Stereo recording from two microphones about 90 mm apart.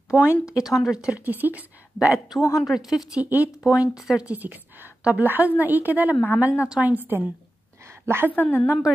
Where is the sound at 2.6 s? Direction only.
5° right (ahead or behind).